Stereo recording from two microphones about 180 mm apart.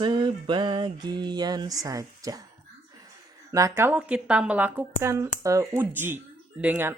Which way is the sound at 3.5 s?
15° right (ahead or behind).